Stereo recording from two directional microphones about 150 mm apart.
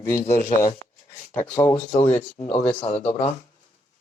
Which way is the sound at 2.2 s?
45° left (ahead or behind).